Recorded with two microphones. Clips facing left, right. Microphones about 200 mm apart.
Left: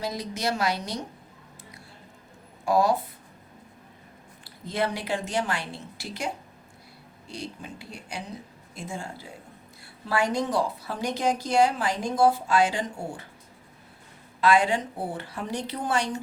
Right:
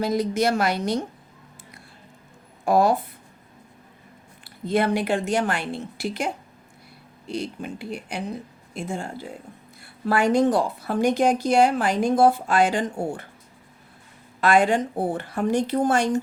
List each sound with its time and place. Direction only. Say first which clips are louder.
0.0 s a woman's voice: right 8 dB; 55° right (ahead or behind)
2.6 s speech: right 3 dB; 55° right (ahead or behind)
4.4 s a woman's voice: right 6 dB; 55° right (ahead or behind)
7.3 s a woman's voice: right 8 dB; 60° right (ahead or behind)
14.4 s speech: right 3 dB; 50° right (ahead or behind)